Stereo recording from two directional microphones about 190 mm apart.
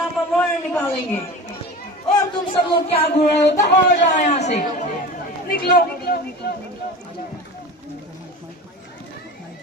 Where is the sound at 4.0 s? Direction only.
40° left (ahead or behind).